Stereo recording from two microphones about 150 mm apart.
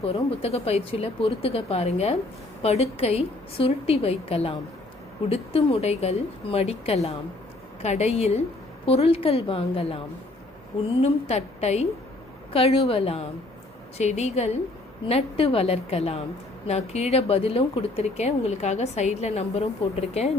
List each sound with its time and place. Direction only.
0.0 s speech: 40° left (ahead or behind)
11.0 s speech: 45° left (ahead or behind)